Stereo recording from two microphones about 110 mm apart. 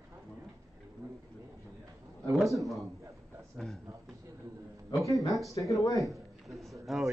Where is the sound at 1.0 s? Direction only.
30° right (ahead or behind).